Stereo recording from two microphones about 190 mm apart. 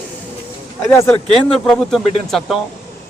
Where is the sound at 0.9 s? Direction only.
10° left (ahead or behind).